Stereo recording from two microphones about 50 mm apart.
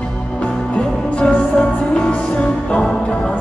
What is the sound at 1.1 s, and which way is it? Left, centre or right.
Music, centre.